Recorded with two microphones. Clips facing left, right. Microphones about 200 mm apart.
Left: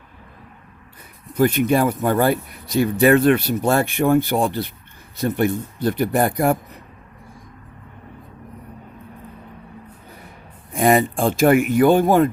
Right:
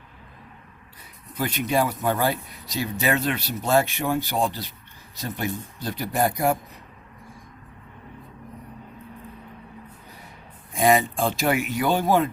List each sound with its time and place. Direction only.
1.4 s speech: 50° left (ahead or behind)
10.7 s speech: 55° left (ahead or behind)